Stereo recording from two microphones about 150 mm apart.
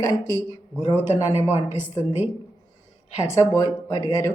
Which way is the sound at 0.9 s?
15° right (ahead or behind).